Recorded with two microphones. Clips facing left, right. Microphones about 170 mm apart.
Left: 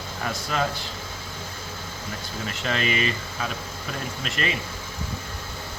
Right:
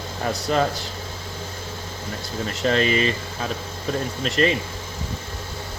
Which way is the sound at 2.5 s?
35° right (ahead or behind).